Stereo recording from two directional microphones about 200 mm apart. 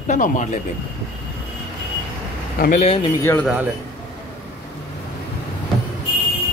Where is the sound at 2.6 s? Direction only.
35° left (ahead or behind).